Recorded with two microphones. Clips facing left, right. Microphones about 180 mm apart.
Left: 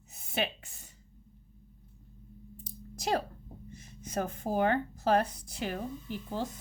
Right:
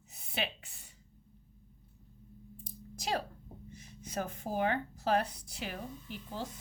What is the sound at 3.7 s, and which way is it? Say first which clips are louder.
Speech: left 4 dB; 45° left (ahead or behind).